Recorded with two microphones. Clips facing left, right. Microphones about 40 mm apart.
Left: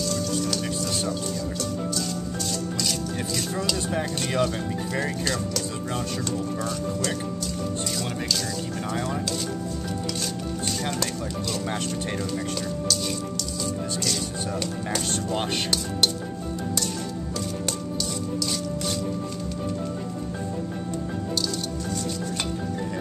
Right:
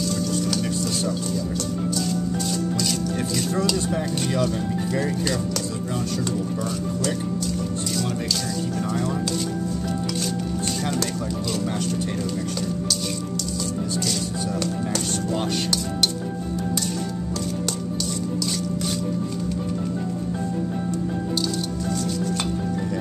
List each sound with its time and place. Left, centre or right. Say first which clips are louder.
3.5 s speech: right 5 dB; centre
3.9 s speech: right 2 dB; left
5.2 s speech: right 2 dB; centre